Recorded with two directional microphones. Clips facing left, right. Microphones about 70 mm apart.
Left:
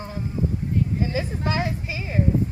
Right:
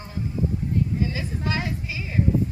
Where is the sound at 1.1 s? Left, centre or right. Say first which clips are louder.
Left 3 dB; left.